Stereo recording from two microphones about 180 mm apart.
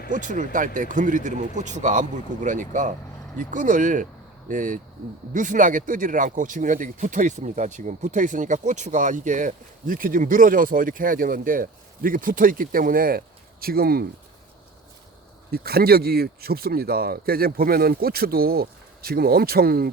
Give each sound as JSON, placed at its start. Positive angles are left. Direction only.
{"t": 0.1, "sound": "speech", "side_deg": -45}
{"t": 15.5, "sound": "speech", "side_deg": -60}